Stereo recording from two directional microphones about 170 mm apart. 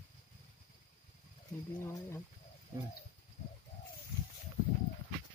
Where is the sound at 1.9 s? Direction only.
15° left (ahead or behind).